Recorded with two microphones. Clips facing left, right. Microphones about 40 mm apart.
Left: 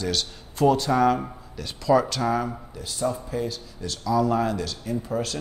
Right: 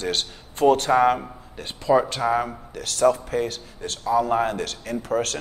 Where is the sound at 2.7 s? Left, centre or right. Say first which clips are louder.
Right 11 dB; right.